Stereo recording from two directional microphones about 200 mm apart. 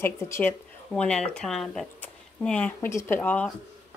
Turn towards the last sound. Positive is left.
turn(degrees=10)  # may be behind; listen again after turning